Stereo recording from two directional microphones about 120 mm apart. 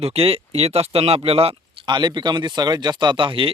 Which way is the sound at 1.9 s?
40° right (ahead or behind).